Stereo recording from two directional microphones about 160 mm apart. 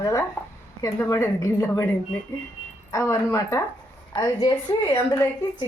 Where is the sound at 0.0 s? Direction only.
20° left (ahead or behind).